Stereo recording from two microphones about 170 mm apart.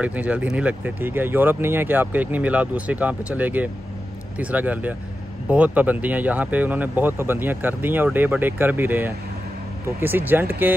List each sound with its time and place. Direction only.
0.0 s speech: 10° right (ahead or behind)